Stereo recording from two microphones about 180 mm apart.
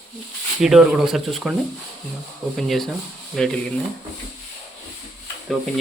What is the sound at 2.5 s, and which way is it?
Speech, centre (ahead or behind).